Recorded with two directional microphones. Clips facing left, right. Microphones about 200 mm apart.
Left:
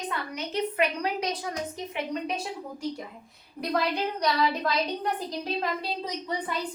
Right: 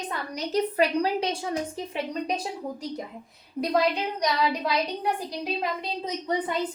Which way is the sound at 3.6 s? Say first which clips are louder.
Right 4 dB; 25° right (ahead or behind).